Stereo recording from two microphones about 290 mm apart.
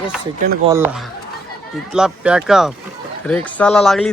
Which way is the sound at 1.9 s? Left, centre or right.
Centre.